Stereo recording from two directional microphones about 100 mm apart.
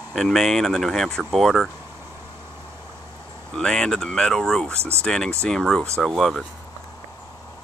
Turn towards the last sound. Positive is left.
turn(degrees=0)  # may be behind; listen again after turning